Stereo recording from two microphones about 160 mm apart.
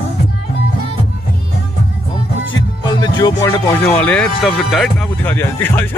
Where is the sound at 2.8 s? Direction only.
25° left (ahead or behind).